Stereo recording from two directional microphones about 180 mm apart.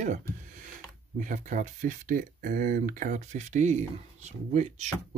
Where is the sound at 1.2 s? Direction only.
45° right (ahead or behind).